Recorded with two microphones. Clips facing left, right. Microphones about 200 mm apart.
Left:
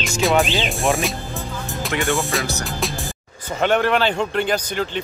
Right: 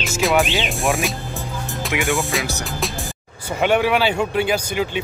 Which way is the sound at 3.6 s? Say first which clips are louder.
Right 1 dB; 10° right (ahead or behind).